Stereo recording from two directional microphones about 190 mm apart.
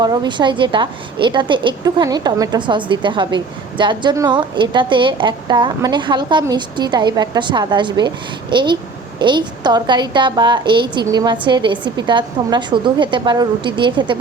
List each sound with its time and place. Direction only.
0.0 s a woman's voice: 20° right (ahead or behind)